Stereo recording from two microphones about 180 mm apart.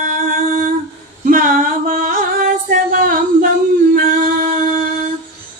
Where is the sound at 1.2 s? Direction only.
50° right (ahead or behind).